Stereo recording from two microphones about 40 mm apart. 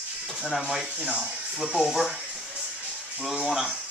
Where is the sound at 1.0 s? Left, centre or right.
Right.